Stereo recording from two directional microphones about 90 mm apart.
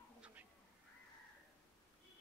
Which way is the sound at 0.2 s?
15° right (ahead or behind).